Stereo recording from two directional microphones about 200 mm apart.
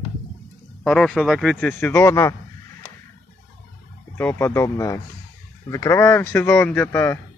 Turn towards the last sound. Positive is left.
turn(degrees=10)  # may be behind; listen again after turning